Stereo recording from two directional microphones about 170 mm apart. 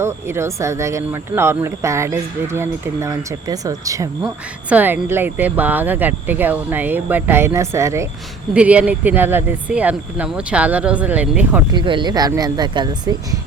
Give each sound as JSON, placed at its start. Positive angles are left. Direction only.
{"t": 0.0, "sound": "speech", "side_deg": -15}
{"t": 11.7, "sound": "speech", "side_deg": -30}